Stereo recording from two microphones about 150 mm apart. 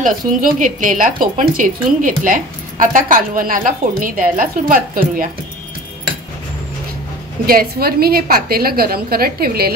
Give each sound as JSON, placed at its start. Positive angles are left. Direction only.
{"t": 0.0, "sound": "a woman's voice", "side_deg": -65}
{"t": 7.4, "sound": "a woman's voice", "side_deg": -85}